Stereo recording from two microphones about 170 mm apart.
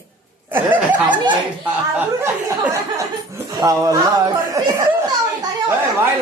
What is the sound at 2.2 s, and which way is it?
A man's voice, 15° right (ahead or behind).